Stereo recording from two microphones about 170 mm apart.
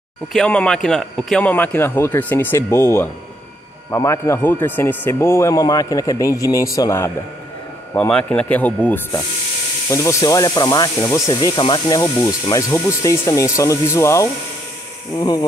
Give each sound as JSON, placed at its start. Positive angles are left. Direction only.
{"t": 0.3, "sound": "speech", "side_deg": 5}
{"t": 7.9, "sound": "speech", "side_deg": 5}